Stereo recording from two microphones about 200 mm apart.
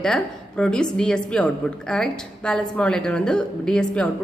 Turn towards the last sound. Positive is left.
turn(degrees=5)  # may be behind; listen again after turning